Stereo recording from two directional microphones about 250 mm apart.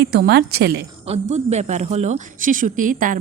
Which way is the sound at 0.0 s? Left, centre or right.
Right.